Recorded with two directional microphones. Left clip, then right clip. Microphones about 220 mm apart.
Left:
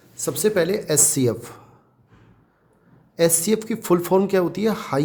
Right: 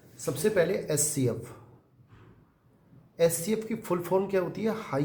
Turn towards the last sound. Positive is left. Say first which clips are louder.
# left 8 dB
turn(degrees=50)  # may be behind; listen again after turning